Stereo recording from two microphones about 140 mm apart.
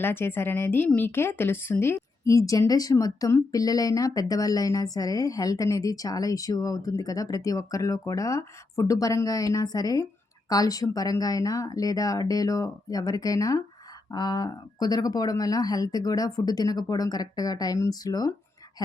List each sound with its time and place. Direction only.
0.0 s speech: 15° left (ahead or behind)